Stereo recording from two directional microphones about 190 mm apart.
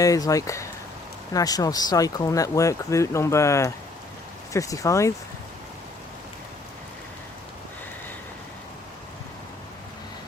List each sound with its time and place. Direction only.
0.0 s speech: 15° left (ahead or behind)